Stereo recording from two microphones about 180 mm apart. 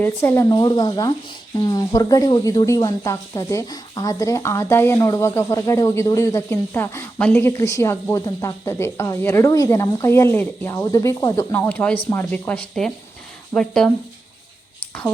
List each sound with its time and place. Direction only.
0.0 s speech: 10° left (ahead or behind)
11.5 s speech: 10° left (ahead or behind)